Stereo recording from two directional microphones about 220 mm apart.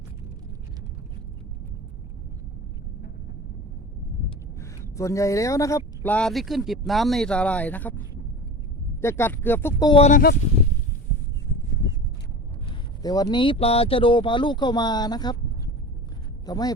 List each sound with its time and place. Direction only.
4.6 s speech: 15° left (ahead or behind)
9.9 s speech: 30° left (ahead or behind)
13.0 s speech: 15° left (ahead or behind)